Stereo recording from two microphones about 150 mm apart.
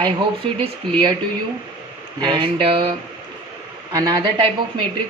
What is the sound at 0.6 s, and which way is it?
Speech, 35° right (ahead or behind).